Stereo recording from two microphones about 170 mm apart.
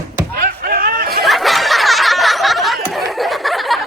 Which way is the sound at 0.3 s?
55° right (ahead or behind).